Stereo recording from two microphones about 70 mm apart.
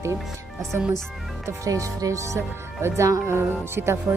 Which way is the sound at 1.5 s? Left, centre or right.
Right.